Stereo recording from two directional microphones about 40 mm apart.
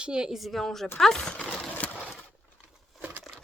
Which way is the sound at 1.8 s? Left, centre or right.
Left.